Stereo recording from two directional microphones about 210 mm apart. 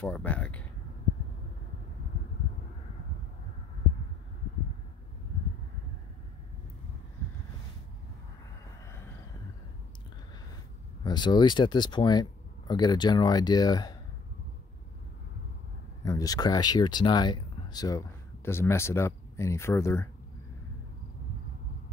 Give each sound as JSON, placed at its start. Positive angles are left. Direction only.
{"t": 0.0, "sound": "a sound", "side_deg": 5}
{"t": 11.1, "sound": "speech", "side_deg": 20}
{"t": 16.0, "sound": "speech", "side_deg": 15}